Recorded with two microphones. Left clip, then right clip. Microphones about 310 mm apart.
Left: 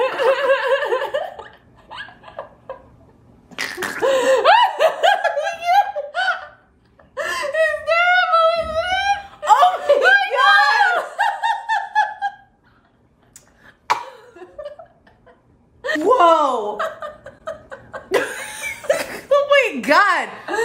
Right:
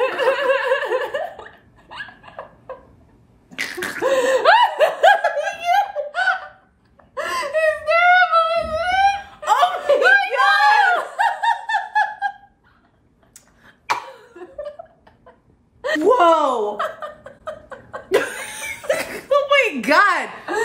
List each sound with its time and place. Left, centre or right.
0.0 s laughter: centre
3.4 s sneeze: centre
4.0 s laughter: centre
5.3 s a sound: centre
7.2 s wail: centre
8.7 s laughter: centre
11.0 s a sound: centre
16.0 s chuckle: centre